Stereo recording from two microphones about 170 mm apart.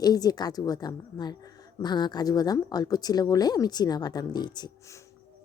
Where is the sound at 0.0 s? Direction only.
20° left (ahead or behind).